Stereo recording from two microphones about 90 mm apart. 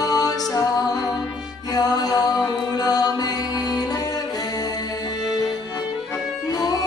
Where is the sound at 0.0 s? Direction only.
45° left (ahead or behind).